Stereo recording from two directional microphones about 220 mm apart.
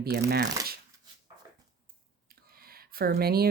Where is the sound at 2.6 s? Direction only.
45° right (ahead or behind).